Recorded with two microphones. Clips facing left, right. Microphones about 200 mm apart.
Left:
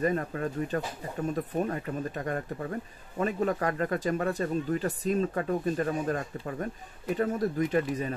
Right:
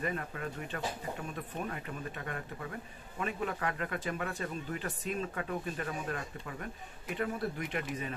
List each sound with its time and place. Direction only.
0.0 s speech: 40° left (ahead or behind)